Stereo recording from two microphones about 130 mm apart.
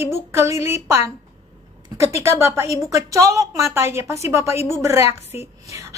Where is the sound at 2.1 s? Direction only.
20° right (ahead or behind).